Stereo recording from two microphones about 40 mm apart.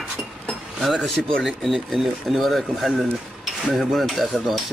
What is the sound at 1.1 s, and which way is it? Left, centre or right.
Speech, centre.